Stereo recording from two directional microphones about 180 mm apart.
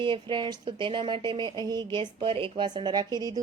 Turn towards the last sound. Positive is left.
turn(degrees=-20)  # may be behind; listen again after turning